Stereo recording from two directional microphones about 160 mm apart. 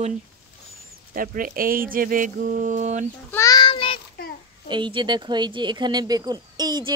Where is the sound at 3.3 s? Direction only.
20° left (ahead or behind).